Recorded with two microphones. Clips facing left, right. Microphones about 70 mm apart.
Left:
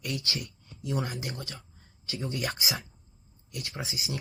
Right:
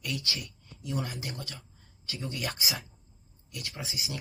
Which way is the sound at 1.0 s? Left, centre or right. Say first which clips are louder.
Left 2 dB; left.